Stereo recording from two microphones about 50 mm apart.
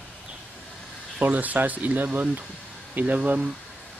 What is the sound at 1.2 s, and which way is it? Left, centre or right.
Speech, right.